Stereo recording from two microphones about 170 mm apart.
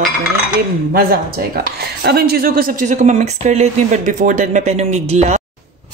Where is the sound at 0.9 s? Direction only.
60° right (ahead or behind); by 5.4 s 40° right (ahead or behind).